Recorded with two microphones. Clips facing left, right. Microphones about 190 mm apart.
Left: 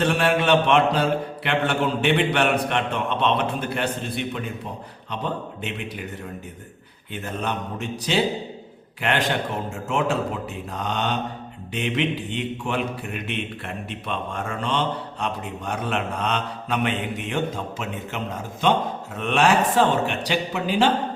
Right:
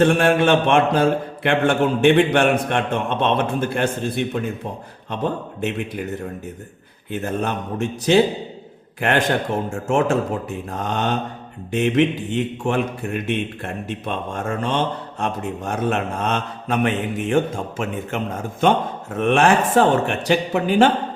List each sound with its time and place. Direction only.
0.0 s a man's voice: 50° right (ahead or behind)
7.1 s a man's voice: 45° right (ahead or behind)